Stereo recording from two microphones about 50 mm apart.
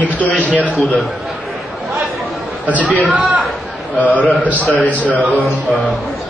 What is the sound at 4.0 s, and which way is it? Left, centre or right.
Speech, left.